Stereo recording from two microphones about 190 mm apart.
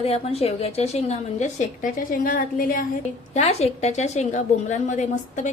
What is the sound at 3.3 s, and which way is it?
A woman's voice, 35° left (ahead or behind).